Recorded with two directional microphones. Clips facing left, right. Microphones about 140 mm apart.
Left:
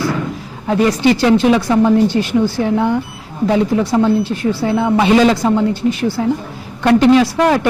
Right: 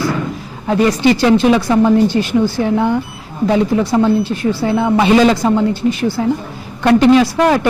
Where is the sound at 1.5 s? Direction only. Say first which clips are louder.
Right 1 dB; 25° right (ahead or behind).